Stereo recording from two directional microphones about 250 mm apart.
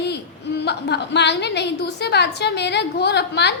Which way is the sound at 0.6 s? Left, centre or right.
Left.